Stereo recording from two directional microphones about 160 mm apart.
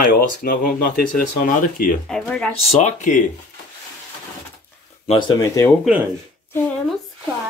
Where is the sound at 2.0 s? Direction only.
5° left (ahead or behind).